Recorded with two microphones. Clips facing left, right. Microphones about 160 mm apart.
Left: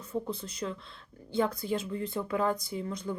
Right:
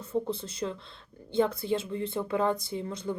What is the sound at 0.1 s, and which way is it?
Speech, 25° right (ahead or behind).